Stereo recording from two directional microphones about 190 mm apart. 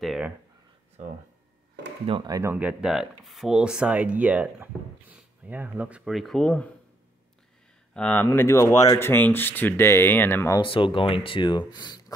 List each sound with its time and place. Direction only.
0.0 s a sound: centre (ahead or behind)
2.0 s speech: 20° right (ahead or behind); by 6.7 s 5° left (ahead or behind)
7.9 s speech: 5° left (ahead or behind)
10.6 s speech: 25° left (ahead or behind)